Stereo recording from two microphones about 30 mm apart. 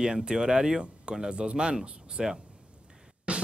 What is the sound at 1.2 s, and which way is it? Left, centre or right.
Speech, right.